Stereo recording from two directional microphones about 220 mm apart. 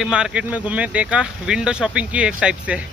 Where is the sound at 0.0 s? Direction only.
5° right (ahead or behind).